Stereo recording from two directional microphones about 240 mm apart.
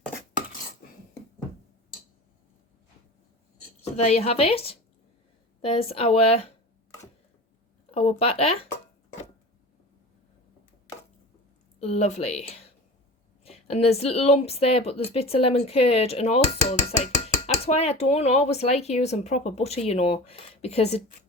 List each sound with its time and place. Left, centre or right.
3.9 s speech: left
7.9 s speech: left
11.8 s speech: left